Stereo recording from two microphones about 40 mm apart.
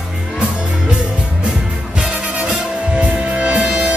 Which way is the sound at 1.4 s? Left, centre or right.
Right.